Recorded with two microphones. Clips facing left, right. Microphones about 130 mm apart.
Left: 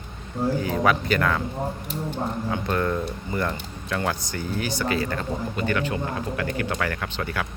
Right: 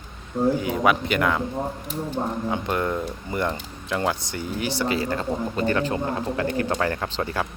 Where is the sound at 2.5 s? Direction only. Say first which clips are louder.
Left 2 dB; 20° right (ahead or behind).